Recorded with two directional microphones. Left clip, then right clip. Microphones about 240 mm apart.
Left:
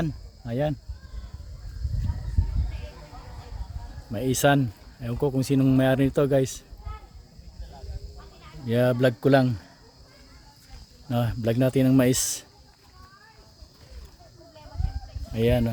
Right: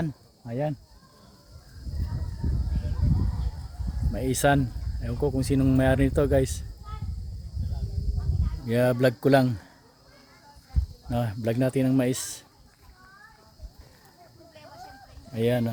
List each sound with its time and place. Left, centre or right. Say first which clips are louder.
0.0 s speech: left 2 dB; centre
4.1 s speech: left 2 dB; centre
8.6 s speech: left 1 dB; centre
11.1 s speech: left 2 dB; centre
15.3 s speech: left 2 dB; centre